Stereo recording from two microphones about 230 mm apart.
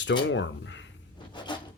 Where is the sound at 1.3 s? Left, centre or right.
Centre.